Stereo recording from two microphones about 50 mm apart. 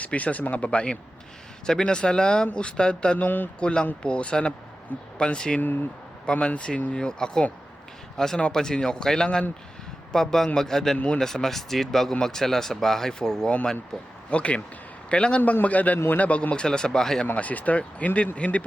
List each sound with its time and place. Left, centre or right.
0.0 s speech: left
3.2 s a man's voice: left
3.6 s speech: left
10.9 s speech: left
11.2 s speech: centre
14.3 s a man's voice: left
17.3 s speech: left